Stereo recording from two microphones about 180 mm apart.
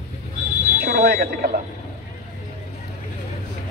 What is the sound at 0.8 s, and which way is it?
Speech, 60° right (ahead or behind).